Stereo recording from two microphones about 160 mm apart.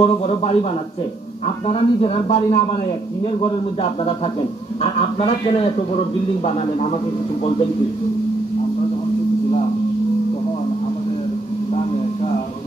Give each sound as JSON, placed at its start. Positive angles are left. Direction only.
{"t": 0.0, "sound": "a man's voice", "side_deg": 40}
{"t": 1.7, "sound": "a man's voice", "side_deg": 40}